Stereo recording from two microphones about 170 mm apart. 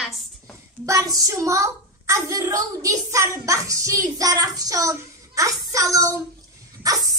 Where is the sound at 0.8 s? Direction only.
20° right (ahead or behind).